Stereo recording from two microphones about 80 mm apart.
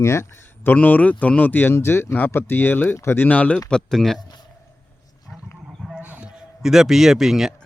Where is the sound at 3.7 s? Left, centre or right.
Centre.